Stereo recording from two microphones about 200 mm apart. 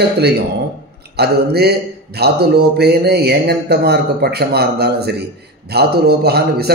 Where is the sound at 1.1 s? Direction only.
55° right (ahead or behind).